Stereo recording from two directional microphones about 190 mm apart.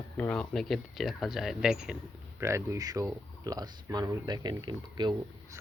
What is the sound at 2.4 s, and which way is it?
Speech, 15° right (ahead or behind).